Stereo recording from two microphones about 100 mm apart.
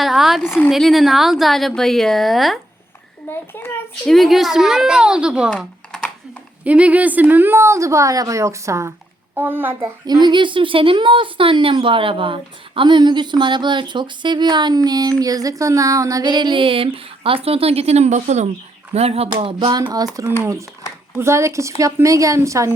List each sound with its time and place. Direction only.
0.0 s a woman's voice: 5° right (ahead or behind)
3.2 s a child's voice: 20° left (ahead or behind)
4.0 s a woman's voice: centre (ahead or behind)
5.5 s typing: 10° left (ahead or behind)
6.7 s speech: 15° right (ahead or behind)
10.1 s a woman's voice: 45° right (ahead or behind); by 18.1 s 90° right
18.9 s a sound: 90° right; by 19.7 s 65° right (ahead or behind)
20.4 s a woman's voice: 30° right (ahead or behind)